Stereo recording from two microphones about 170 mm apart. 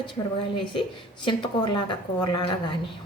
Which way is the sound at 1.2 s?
25° left (ahead or behind).